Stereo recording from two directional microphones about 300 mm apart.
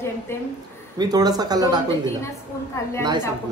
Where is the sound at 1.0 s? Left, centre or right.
Centre.